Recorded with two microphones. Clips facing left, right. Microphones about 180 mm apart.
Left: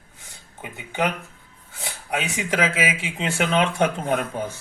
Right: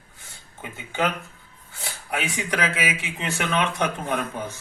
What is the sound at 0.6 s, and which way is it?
Speech, 15° left (ahead or behind).